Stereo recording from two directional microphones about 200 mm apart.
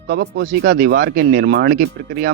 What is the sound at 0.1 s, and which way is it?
Speech, 55° right (ahead or behind).